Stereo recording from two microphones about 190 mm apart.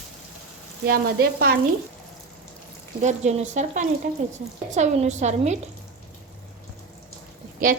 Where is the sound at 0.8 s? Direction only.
50° right (ahead or behind).